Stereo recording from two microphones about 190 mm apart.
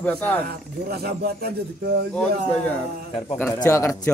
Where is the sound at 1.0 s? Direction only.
55° right (ahead or behind).